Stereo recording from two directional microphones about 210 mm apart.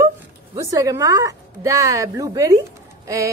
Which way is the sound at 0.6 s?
15° right (ahead or behind).